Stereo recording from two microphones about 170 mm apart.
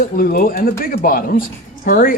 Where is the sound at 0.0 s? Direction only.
55° left (ahead or behind).